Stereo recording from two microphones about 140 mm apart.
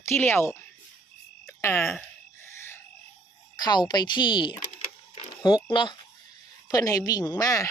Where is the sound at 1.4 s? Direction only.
20° left (ahead or behind).